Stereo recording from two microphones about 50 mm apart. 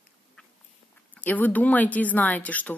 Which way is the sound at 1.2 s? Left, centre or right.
Left.